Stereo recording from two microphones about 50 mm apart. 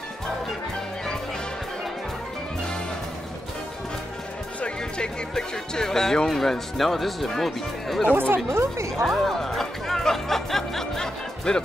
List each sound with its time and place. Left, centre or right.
4.6 s speech: centre
8.1 s speech: right
8.5 s speech: right
9.0 s music: centre